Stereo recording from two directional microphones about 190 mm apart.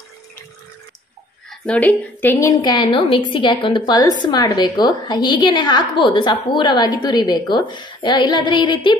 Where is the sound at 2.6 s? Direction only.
25° left (ahead or behind).